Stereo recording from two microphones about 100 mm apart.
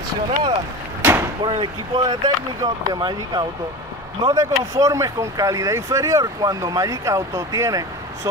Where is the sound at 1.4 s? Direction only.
55° right (ahead or behind).